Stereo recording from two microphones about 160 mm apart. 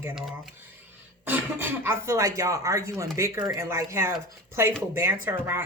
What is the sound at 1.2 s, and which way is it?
Speech, 10° right (ahead or behind).